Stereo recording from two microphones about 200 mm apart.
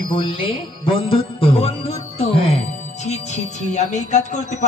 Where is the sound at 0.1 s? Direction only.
25° left (ahead or behind).